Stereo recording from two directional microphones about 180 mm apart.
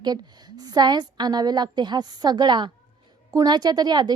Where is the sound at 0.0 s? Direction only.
25° right (ahead or behind).